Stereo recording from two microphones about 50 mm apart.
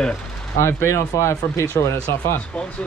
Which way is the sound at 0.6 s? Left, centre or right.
Left.